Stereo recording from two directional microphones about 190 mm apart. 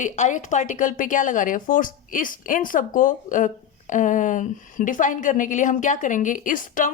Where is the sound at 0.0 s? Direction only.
40° left (ahead or behind).